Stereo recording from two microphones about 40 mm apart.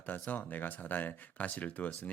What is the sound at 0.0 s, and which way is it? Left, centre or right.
Speech, left.